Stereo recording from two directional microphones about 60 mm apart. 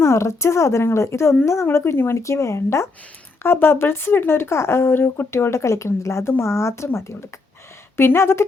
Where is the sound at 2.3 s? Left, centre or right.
Left.